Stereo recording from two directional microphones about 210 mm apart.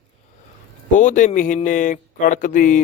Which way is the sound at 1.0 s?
35° left (ahead or behind).